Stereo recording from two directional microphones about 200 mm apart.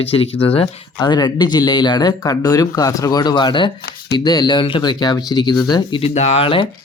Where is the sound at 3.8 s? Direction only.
50° left (ahead or behind).